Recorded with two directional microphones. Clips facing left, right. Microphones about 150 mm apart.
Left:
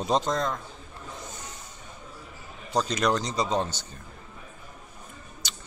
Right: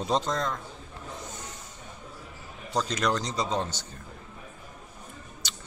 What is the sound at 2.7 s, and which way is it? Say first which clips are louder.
Speech: left 2 dB; 15° left (ahead or behind).